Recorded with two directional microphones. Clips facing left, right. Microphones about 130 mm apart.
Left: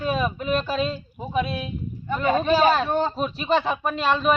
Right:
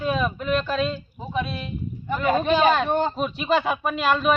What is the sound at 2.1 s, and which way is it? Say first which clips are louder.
Speech: even; 5° right (ahead or behind).